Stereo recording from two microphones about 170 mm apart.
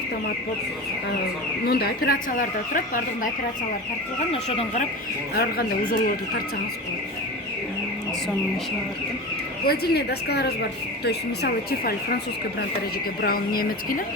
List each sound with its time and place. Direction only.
1.6 s speech: 65° left (ahead or behind)
4.3 s speech: 40° left (ahead or behind)
5.4 s speech: 60° left (ahead or behind)
9.6 s speech: 70° left (ahead or behind)
13.2 s speech: 60° left (ahead or behind)